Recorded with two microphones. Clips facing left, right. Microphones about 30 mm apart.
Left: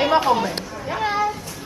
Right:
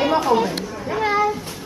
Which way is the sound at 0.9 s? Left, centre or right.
Centre.